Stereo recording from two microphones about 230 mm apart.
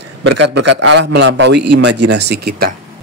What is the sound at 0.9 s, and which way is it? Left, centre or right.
A woman's voice, right.